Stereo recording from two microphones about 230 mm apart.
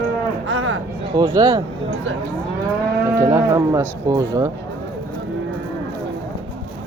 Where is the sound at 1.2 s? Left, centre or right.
Centre.